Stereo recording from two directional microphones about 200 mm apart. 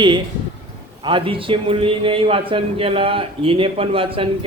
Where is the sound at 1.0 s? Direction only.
25° right (ahead or behind).